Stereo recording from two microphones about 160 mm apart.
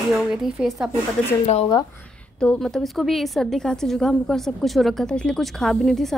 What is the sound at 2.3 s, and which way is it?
A woman's voice, 5° left (ahead or behind).